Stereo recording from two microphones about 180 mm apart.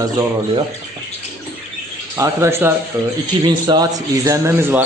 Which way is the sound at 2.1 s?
15° right (ahead or behind).